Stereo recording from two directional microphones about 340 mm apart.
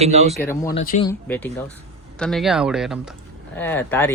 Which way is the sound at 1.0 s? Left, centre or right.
Centre.